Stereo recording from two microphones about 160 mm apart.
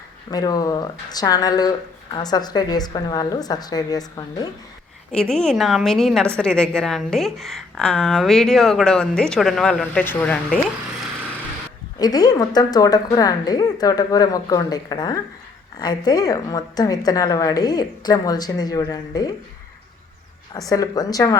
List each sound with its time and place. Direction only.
0.3 s a woman's voice: 25° left (ahead or behind)
5.1 s a woman's voice: 5° left (ahead or behind)
11.9 s a woman's voice: 25° left (ahead or behind)
20.7 s a woman's voice: 20° left (ahead or behind)